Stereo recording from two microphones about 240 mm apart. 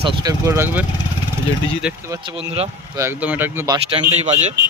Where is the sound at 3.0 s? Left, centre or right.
Centre.